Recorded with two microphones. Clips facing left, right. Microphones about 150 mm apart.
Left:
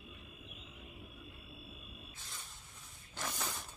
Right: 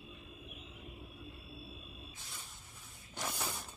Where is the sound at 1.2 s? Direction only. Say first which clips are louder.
Right 3 dB; 30° right (ahead or behind).